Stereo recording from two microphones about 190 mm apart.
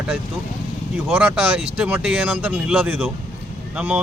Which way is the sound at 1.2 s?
5° right (ahead or behind).